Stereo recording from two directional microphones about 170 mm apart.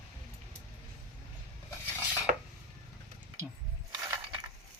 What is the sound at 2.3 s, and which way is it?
Dishes, 45° right (ahead or behind).